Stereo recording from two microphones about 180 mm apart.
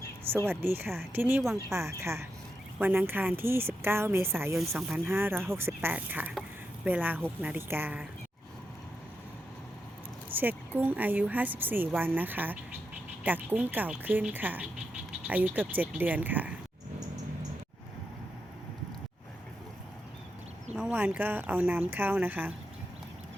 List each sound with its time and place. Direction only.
0.4 s a woman's voice: 10° right (ahead or behind)
10.3 s a woman's voice: 10° right (ahead or behind)
20.7 s a woman's voice: 5° right (ahead or behind)